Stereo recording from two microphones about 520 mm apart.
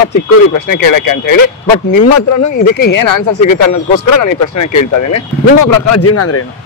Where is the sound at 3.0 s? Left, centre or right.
Left.